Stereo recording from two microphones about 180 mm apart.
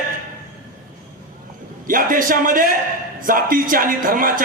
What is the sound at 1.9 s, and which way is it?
A man's voice, 50° right (ahead or behind).